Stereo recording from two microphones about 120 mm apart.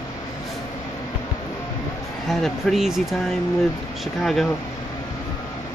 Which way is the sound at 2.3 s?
Centre (ahead or behind).